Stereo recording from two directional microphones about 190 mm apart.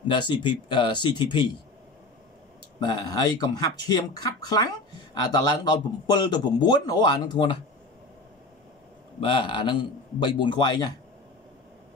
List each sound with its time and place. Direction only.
0.1 s a man's voice: 25° left (ahead or behind)
2.8 s a man's voice: 20° left (ahead or behind)
9.2 s a man's voice: 25° left (ahead or behind)